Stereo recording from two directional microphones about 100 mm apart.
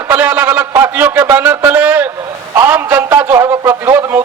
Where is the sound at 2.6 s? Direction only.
20° right (ahead or behind).